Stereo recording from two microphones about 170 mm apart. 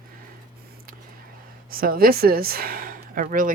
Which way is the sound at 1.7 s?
60° right (ahead or behind).